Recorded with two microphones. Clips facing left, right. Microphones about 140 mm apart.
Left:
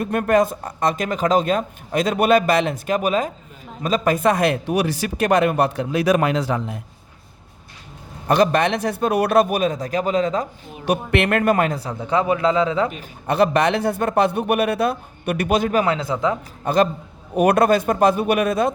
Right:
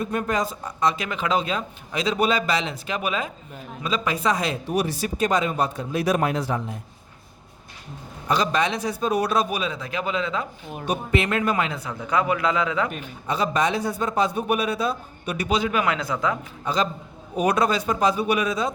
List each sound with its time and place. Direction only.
0.0 s speech: 60° left (ahead or behind); by 6.7 s 90° left
8.3 s a man's voice: 55° left (ahead or behind); by 10.4 s 40° left (ahead or behind)
10.8 s a man's voice: 65° left (ahead or behind)
11.8 s speech: 30° left (ahead or behind)
13.2 s a man's voice: 60° left (ahead or behind)
15.8 s speech: 30° left (ahead or behind)
16.6 s a man's voice: 55° left (ahead or behind)